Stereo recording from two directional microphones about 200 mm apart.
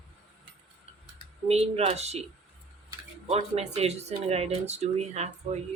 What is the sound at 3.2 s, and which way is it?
Speech, 35° right (ahead or behind).